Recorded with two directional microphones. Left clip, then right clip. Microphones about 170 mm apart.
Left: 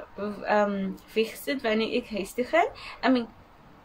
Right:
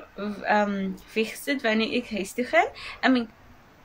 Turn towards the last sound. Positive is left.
turn(degrees=-10)  # may be behind; listen again after turning